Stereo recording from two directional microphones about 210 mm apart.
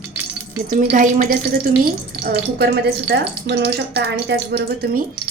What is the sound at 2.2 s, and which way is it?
Speech, 50° right (ahead or behind).